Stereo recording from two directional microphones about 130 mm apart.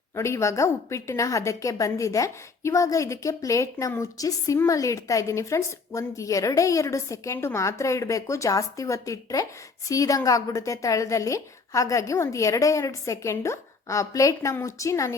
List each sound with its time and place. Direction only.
0.2 s a woman's voice: 20° left (ahead or behind)